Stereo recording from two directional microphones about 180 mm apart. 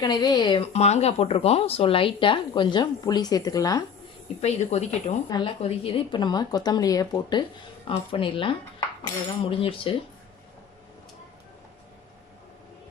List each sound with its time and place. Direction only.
0.0 s speech: 25° left (ahead or behind)
4.4 s speech: 35° left (ahead or behind)
5.3 s speech: 30° left (ahead or behind)